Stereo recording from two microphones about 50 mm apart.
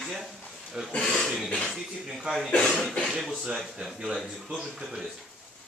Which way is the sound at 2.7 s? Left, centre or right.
Centre.